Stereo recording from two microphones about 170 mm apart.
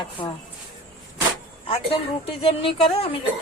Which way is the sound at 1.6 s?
35° left (ahead or behind).